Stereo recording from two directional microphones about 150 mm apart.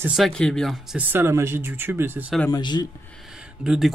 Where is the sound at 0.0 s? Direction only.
Centre (ahead or behind).